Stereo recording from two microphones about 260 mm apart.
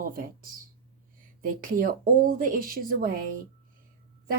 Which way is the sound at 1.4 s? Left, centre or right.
Right.